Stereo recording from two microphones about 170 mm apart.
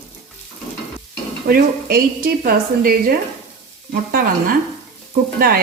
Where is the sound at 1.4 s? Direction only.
60° right (ahead or behind).